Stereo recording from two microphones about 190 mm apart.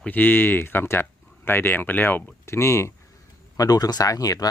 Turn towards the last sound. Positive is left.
turn(degrees=20)  # may be behind; listen again after turning